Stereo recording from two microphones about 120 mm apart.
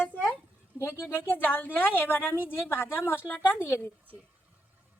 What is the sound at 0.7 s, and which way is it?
A woman's voice, 25° left (ahead or behind).